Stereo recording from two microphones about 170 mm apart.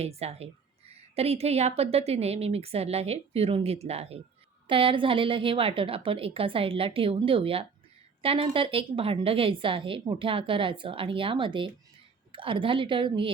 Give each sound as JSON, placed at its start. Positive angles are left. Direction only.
{"t": 0.0, "sound": "a woman's voice", "side_deg": -40}